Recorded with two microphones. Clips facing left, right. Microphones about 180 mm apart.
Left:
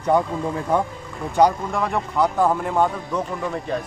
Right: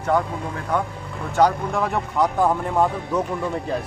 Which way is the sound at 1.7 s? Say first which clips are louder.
Even; centre (ahead or behind).